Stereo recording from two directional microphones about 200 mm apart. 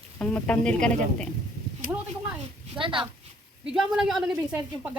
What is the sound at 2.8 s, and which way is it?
Speech, 25° right (ahead or behind).